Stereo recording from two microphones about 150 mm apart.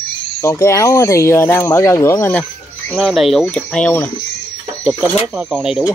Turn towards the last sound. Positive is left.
turn(degrees=-5)  # may be behind; listen again after turning